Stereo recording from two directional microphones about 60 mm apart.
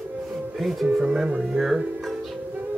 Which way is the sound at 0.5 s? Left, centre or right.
Centre.